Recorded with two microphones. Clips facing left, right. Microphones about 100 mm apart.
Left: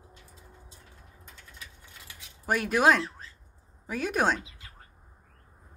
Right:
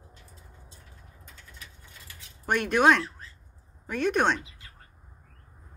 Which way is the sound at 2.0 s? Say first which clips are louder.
Right 1 dB; 5° left (ahead or behind).